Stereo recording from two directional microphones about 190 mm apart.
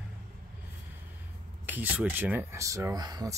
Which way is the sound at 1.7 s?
10° right (ahead or behind).